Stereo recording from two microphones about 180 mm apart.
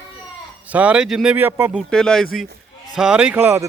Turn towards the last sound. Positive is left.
turn(degrees=-15)  # may be behind; listen again after turning